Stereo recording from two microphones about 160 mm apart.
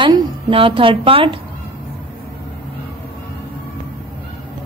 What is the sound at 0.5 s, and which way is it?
Speech, 35° right (ahead or behind).